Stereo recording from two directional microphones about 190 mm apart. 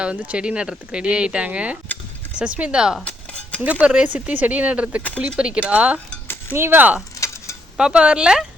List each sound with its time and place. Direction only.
0.0 s speech: 5° right (ahead or behind)
3.0 s cutlery: 5° left (ahead or behind)
3.6 s speech: 5° right (ahead or behind)
7.2 s a sound: 15° left (ahead or behind)
7.8 s speech: 5° right (ahead or behind)